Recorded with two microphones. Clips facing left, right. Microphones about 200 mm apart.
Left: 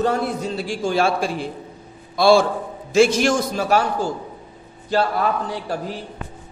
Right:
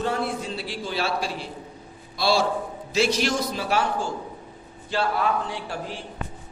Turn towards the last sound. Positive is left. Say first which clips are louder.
# left 5 dB
turn(degrees=40)  # may be behind; listen again after turning